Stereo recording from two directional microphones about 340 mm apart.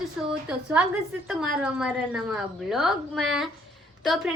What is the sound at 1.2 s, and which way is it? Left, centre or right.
A woman's voice, centre.